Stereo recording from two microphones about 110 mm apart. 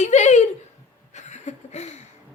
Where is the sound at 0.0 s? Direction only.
90° left.